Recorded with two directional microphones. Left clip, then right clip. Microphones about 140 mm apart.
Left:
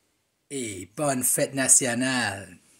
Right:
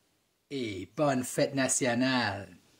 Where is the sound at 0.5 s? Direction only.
30° left (ahead or behind).